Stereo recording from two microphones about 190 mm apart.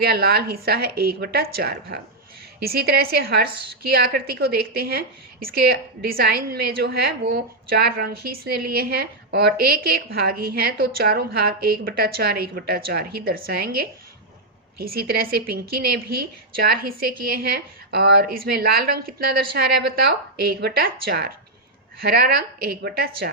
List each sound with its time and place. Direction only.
0.0 s a woman's voice: 55° right (ahead or behind)